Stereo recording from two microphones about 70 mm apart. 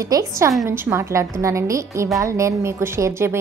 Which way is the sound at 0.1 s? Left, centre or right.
Right.